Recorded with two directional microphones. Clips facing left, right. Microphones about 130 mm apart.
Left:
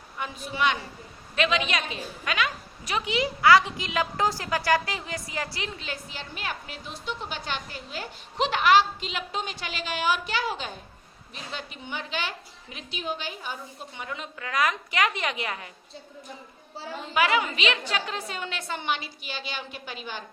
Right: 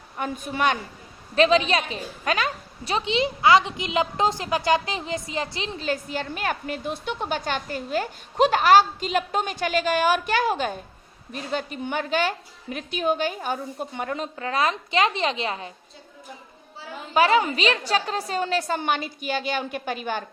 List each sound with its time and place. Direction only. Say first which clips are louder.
0.2 s a woman's voice: right 3 dB; 50° right (ahead or behind)
1.4 s a woman's voice: right 7 dB; 35° right (ahead or behind)
5.8 s a woman's voice: right 10 dB; 50° right (ahead or behind)
14.3 s a woman's voice: right 1 dB; 30° right (ahead or behind)
17.2 s a woman's voice: right 5 dB; 35° right (ahead or behind); by 20.2 s 50° right (ahead or behind)